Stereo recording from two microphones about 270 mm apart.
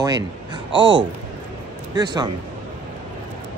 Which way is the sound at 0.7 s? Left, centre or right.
Centre.